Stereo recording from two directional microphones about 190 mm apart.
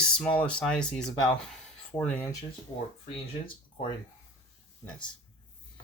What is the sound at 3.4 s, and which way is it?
Speech, 25° left (ahead or behind).